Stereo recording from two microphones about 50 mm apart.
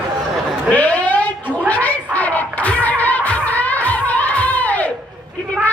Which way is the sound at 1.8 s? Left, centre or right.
Left.